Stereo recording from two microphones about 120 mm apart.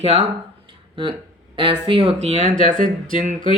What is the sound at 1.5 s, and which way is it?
Speech, 45° right (ahead or behind).